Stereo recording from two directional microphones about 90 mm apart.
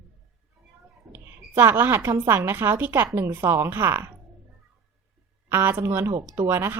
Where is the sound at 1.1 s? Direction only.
25° right (ahead or behind).